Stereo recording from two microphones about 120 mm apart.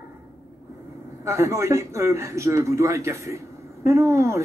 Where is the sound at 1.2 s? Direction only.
25° right (ahead or behind).